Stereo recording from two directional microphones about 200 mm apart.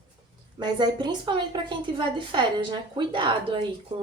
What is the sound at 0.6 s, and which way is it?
A woman's voice, 20° right (ahead or behind).